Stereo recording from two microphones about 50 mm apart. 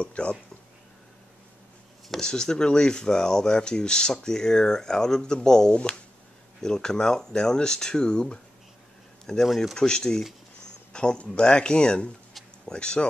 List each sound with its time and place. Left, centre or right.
0.0 s speech: left
2.0 s speech: centre